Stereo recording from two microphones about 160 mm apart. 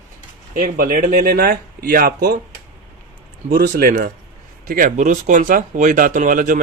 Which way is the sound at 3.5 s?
60° right (ahead or behind).